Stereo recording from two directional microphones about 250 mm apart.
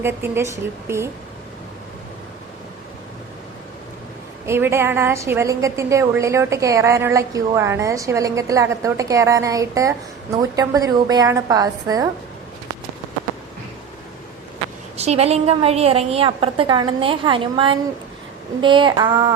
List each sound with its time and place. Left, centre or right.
0.0 s a woman's voice: centre
4.4 s a woman's voice: centre
14.9 s a woman's voice: right